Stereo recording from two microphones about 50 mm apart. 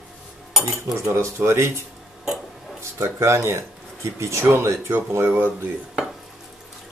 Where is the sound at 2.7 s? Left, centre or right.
Right.